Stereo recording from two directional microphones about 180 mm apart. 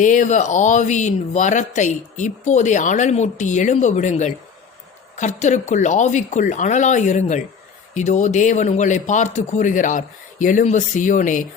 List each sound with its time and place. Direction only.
0.0 s speech: 45° left (ahead or behind)